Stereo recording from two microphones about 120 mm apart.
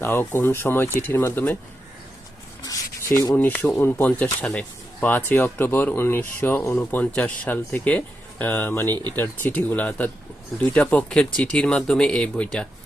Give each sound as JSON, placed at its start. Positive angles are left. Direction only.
{"t": 0.0, "sound": "speech", "side_deg": 15}
{"t": 2.6, "sound": "rub", "side_deg": 25}
{"t": 3.3, "sound": "speech", "side_deg": 15}